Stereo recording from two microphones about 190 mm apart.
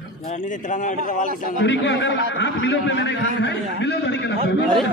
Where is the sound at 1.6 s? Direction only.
70° left (ahead or behind).